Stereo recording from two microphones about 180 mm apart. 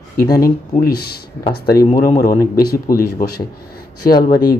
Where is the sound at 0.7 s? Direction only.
60° left (ahead or behind).